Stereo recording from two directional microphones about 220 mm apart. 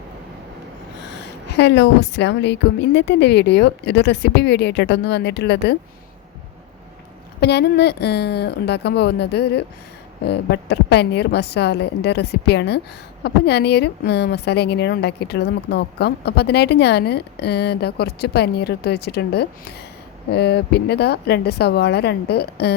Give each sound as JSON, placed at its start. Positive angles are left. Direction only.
{"t": 1.5, "sound": "a woman's voice", "side_deg": 50}
{"t": 7.4, "sound": "a woman's voice", "side_deg": 50}